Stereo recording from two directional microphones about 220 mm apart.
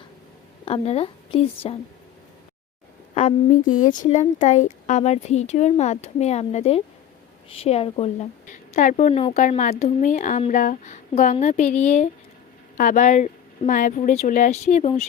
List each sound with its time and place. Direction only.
0.6 s a woman's voice: 25° left (ahead or behind)
3.2 s a woman's voice: 35° left (ahead or behind)